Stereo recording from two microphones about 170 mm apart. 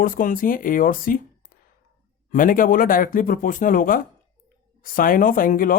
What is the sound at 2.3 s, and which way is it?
Speech, 55° left (ahead or behind).